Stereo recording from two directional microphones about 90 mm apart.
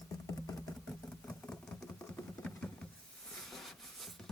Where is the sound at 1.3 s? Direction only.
10° left (ahead or behind).